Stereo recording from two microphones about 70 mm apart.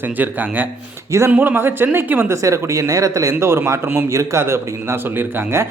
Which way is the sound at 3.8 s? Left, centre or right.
Right.